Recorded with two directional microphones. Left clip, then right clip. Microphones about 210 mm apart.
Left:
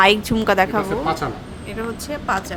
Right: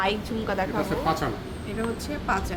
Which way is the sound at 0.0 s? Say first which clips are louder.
Left 12 dB; 40° left (ahead or behind).